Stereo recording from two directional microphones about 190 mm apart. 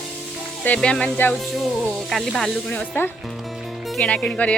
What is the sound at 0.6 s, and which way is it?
A woman's voice, 5° left (ahead or behind).